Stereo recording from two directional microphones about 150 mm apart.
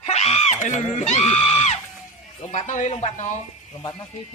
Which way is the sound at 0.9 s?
45° left (ahead or behind).